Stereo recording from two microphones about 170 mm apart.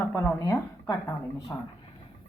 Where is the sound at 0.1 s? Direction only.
15° left (ahead or behind).